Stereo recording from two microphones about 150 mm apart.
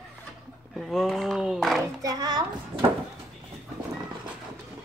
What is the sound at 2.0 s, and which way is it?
Speech, 25° right (ahead or behind).